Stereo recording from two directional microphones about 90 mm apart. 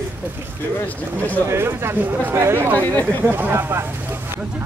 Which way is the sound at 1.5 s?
25° right (ahead or behind).